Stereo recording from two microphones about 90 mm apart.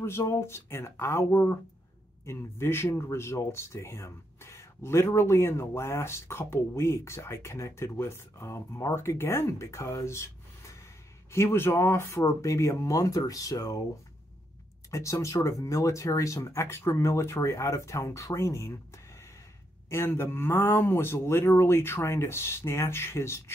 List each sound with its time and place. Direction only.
0.0 s speech: 30° left (ahead or behind)
14.9 s speech: 35° left (ahead or behind)
19.9 s speech: 30° left (ahead or behind)